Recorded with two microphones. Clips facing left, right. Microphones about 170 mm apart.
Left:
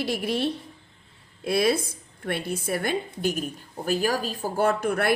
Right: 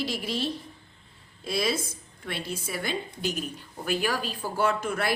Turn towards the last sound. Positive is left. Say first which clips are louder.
# left 4 dB
turn(degrees=60)  # may be behind; listen again after turning